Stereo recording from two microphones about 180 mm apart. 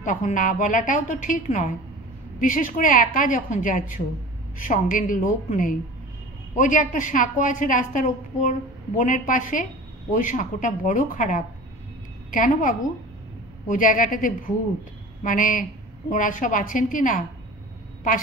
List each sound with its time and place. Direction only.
0.0 s a woman's voice: 45° left (ahead or behind)